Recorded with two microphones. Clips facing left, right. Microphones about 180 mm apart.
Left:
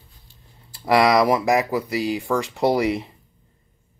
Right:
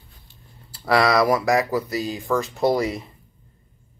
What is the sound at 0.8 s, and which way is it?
Speech, 15° left (ahead or behind).